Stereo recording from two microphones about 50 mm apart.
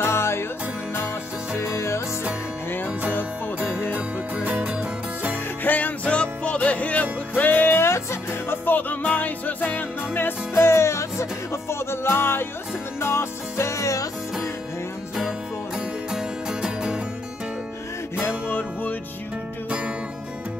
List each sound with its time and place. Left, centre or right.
0.0 s music: left
1.8 s music: left
3.9 s music: right
5.6 s music: left
7.9 s music: left
8.6 s music: left
10.5 s music: left
16.1 s music: centre
18.5 s music: left